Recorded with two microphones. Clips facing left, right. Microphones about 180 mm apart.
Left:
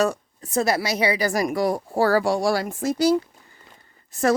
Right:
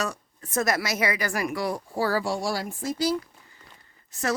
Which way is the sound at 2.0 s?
60° left (ahead or behind).